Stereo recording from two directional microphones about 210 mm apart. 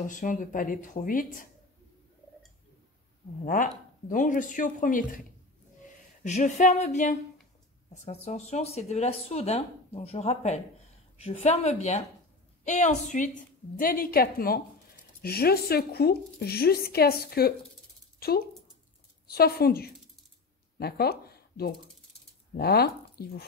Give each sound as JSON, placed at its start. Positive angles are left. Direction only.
{"t": 0.0, "sound": "speech", "side_deg": 40}
{"t": 4.1, "sound": "speech", "side_deg": 40}
{"t": 6.2, "sound": "a woman's voice", "side_deg": 35}
{"t": 19.2, "sound": "a woman's voice", "side_deg": 45}